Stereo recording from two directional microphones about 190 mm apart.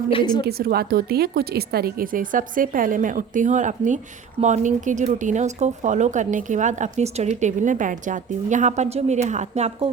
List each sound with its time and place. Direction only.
0.1 s a woman's voice: 25° left (ahead or behind)
0.4 s speech: 55° right (ahead or behind); by 9.9 s 35° right (ahead or behind)